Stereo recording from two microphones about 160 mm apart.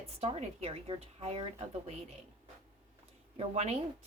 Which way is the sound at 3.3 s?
40° right (ahead or behind).